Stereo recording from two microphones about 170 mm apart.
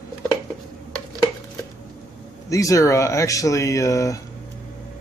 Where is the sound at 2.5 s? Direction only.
20° left (ahead or behind).